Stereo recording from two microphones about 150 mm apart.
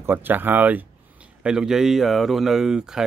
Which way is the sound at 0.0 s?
15° right (ahead or behind).